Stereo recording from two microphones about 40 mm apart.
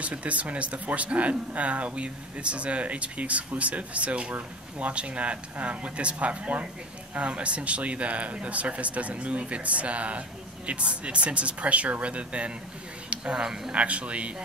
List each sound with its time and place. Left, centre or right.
0.0 s speech: right; by 13.7 s centre
13.7 s speech: right